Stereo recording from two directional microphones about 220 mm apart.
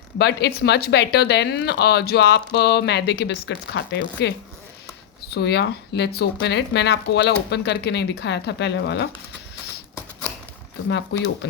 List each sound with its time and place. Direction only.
0.2 s speech: 50° left (ahead or behind)
11.1 s speech: 50° left (ahead or behind)